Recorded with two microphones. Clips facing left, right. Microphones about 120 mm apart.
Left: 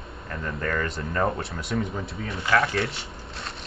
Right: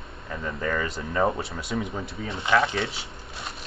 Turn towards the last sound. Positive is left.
turn(degrees=0)  # may be behind; listen again after turning